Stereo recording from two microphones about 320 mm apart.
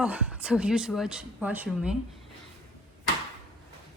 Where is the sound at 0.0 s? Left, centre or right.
Centre.